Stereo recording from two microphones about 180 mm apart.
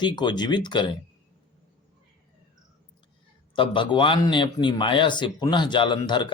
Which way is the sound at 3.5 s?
25° left (ahead or behind).